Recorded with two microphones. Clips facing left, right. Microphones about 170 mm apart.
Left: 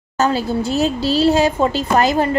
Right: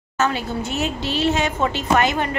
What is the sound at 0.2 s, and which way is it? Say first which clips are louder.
A woman's voice: left 5 dB; 35° left (ahead or behind).